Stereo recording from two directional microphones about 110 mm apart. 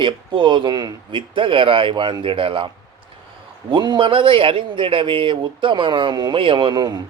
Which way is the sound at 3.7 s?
45° right (ahead or behind).